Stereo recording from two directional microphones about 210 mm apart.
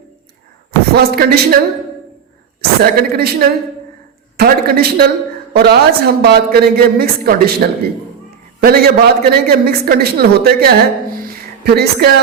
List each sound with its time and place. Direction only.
0.9 s a woman's voice: 50° right (ahead or behind)
2.6 s a woman's voice: 50° right (ahead or behind)
4.4 s a woman's voice: 45° right (ahead or behind)